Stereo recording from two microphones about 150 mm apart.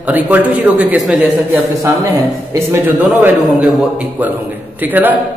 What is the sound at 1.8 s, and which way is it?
A man's voice, 20° right (ahead or behind).